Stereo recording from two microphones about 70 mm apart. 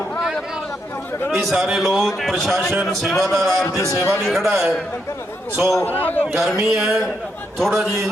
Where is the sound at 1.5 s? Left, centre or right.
Centre.